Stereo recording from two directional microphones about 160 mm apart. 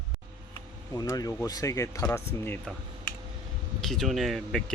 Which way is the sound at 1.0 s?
20° left (ahead or behind).